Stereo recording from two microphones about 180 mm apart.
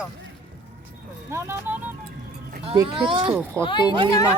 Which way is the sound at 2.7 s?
25° right (ahead or behind).